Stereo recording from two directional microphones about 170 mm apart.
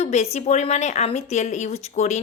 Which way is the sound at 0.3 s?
40° left (ahead or behind).